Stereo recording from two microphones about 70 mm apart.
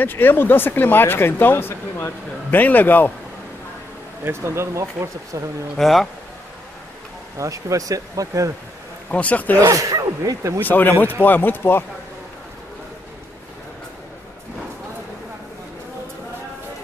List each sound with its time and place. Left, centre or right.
0.0 s speech: left
4.2 s speech: right
5.8 s speech: centre
7.3 s speech: right
9.1 s speech: left
9.6 s speech: right
10.6 s speech: left